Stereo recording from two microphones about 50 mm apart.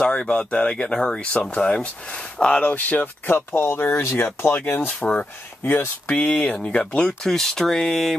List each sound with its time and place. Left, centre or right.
0.0 s speech: centre
2.6 s speech: left
3.3 s speech: left
4.8 s speech: left
7.2 s speech: centre